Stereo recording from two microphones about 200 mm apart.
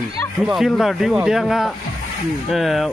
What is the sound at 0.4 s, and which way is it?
Speech, centre (ahead or behind).